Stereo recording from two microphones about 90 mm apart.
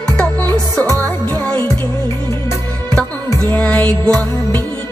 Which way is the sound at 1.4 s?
10° left (ahead or behind).